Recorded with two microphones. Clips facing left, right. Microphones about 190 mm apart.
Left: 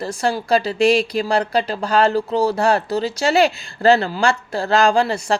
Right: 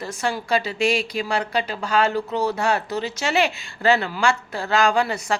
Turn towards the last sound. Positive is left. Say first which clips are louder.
# left 4 dB
turn(degrees=30)  # may be behind; listen again after turning